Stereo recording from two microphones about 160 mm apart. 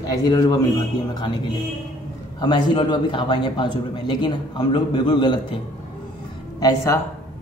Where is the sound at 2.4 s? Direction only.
30° left (ahead or behind).